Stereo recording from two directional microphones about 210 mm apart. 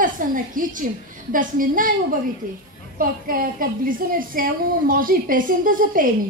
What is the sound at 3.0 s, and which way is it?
A woman's voice, 40° right (ahead or behind).